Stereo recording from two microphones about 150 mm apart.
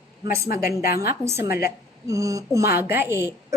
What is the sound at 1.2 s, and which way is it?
A woman's voice, 20° right (ahead or behind).